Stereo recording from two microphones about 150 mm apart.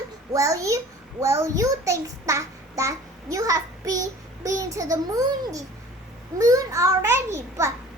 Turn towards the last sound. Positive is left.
turn(degrees=-20)  # may be behind; listen again after turning